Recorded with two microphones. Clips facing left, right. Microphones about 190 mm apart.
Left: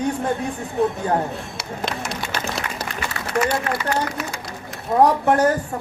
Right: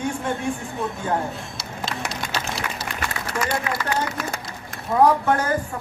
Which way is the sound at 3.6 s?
50° left (ahead or behind).